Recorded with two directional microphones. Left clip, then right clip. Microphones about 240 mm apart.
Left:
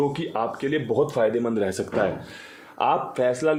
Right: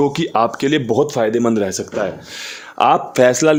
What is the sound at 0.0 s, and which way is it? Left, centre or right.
Speech, right.